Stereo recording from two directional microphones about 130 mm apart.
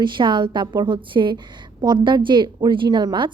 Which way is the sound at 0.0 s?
35° right (ahead or behind).